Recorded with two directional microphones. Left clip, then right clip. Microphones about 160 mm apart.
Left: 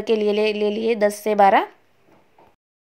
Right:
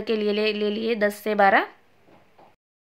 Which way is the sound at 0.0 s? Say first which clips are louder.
Left 4 dB; 25° left (ahead or behind).